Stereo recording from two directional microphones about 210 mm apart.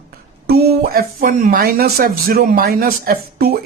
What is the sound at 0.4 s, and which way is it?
Speech, 45° right (ahead or behind).